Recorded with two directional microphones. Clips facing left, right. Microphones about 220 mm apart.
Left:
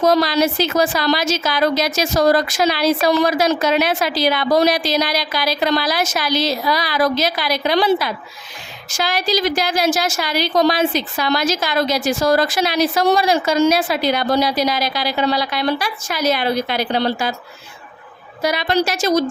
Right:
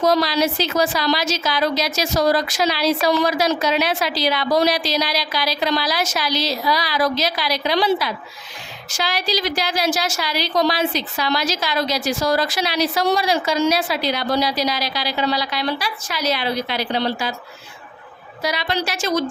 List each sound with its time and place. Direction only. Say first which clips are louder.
0.0 s a woman's voice: left 3 dB; 50° left (ahead or behind)
18.4 s a woman's voice: left 5 dB; 50° left (ahead or behind)